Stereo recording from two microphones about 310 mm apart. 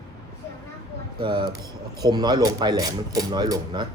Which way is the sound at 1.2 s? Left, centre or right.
Centre.